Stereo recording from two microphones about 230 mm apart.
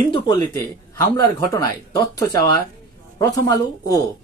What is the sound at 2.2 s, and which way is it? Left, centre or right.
Speech, centre.